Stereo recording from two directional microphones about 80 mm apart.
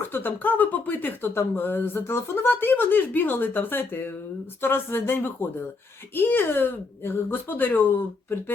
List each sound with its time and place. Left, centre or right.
0.1 s speech: left